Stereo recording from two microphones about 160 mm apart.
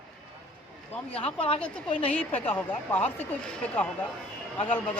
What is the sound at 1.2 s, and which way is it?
Speech, 35° left (ahead or behind).